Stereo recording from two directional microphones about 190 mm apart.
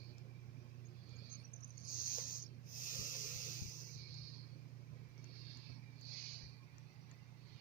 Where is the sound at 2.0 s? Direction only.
50° left (ahead or behind).